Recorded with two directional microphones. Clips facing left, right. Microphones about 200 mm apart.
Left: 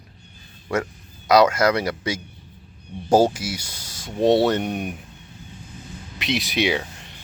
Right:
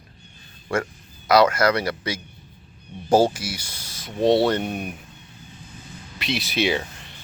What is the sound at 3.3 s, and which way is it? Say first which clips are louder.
Speech: left 2 dB; 25° left (ahead or behind).